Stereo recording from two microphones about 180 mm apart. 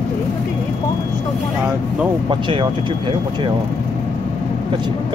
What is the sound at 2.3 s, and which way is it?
Speech, 25° right (ahead or behind).